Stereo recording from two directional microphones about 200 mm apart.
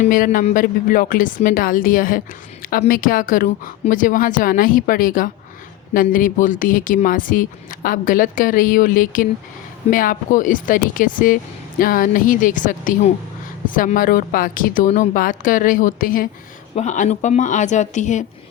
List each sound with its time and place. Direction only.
0.0 s a woman's voice: 40° left (ahead or behind)